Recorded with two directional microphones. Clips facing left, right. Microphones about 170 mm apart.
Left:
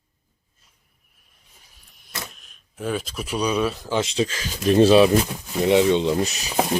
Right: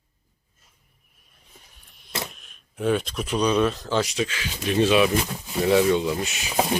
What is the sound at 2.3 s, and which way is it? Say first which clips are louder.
Speech: right 3 dB; centre (ahead or behind).